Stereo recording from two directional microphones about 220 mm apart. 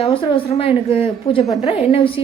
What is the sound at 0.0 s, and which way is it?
A woman's voice, 25° left (ahead or behind).